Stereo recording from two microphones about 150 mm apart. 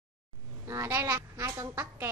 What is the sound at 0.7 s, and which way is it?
A woman's voice, 20° right (ahead or behind).